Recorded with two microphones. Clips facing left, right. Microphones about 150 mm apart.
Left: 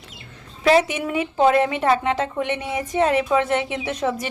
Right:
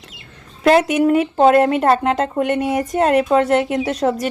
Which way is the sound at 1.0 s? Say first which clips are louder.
Right 6 dB; 50° right (ahead or behind).